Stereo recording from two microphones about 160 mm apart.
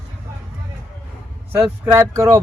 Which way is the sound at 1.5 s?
10° right (ahead or behind).